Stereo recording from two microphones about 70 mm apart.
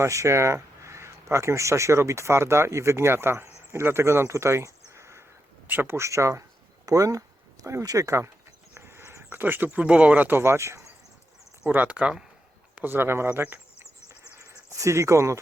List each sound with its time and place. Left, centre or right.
0.0 s speech: right
5.6 s speech: right
8.7 s a sound: right
9.6 s speech: centre; by 10.8 s right
11.7 s speech: right
12.7 s speech: right
14.8 s speech: right